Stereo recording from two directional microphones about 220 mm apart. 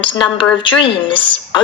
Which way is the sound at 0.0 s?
20° left (ahead or behind).